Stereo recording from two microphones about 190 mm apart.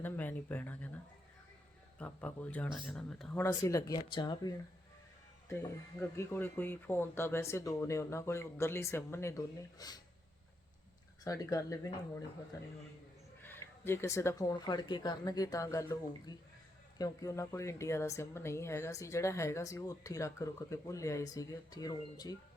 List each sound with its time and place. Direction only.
0.0 s speech: 10° left (ahead or behind)
2.0 s speech: 10° left (ahead or behind)
3.4 s speech: 15° left (ahead or behind)
6.0 s speech: 10° left (ahead or behind)
11.2 s speech: 20° left (ahead or behind)
13.4 s speech: 10° left (ahead or behind)